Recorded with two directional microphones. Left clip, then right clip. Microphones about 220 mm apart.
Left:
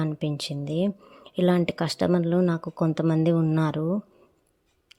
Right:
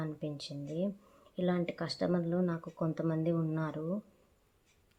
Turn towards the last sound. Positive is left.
turn(degrees=45)  # may be behind; listen again after turning